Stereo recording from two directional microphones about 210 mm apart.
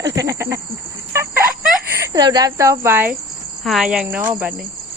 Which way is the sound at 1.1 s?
10° right (ahead or behind).